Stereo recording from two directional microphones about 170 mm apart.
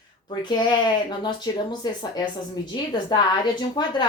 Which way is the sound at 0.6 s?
25° left (ahead or behind).